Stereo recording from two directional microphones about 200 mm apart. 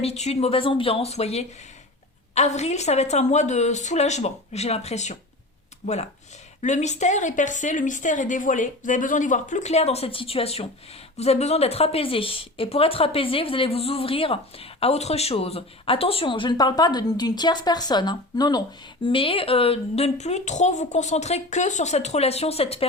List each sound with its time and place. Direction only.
0.0 s a woman's voice: 30° left (ahead or behind)